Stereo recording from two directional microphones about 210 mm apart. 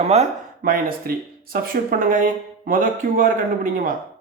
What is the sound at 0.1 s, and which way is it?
Speech, 35° right (ahead or behind).